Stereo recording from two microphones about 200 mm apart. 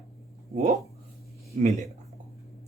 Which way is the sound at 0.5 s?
40° right (ahead or behind).